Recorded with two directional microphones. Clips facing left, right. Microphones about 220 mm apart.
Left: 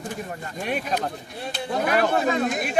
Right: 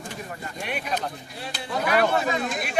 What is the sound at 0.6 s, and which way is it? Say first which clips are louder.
Speech: left 3 dB; 40° left (ahead or behind).